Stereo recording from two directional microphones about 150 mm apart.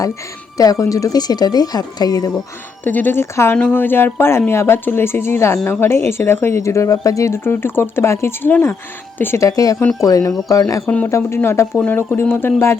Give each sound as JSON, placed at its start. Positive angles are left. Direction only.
{"t": 0.5, "sound": "speech", "side_deg": 25}
{"t": 2.8, "sound": "speech", "side_deg": 10}